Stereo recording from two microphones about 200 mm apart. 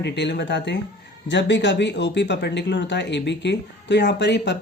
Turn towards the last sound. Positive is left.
turn(degrees=60)  # may be behind; listen again after turning